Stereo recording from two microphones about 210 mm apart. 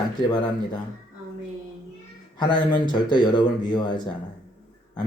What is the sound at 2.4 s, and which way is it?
Speech, 20° left (ahead or behind).